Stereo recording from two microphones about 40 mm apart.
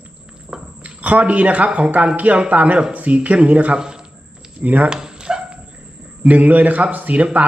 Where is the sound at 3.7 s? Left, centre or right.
Centre.